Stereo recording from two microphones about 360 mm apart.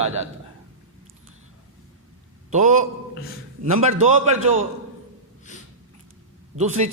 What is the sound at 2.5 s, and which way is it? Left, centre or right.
A man's voice, right.